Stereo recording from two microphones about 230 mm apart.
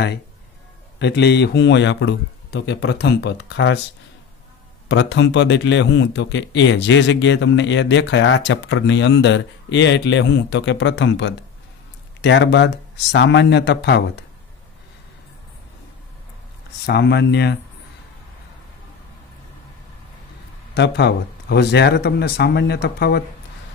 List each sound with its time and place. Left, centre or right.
0.9 s a man's voice: left
4.8 s a man's voice: left
16.8 s a man's voice: left
20.7 s a man's voice: left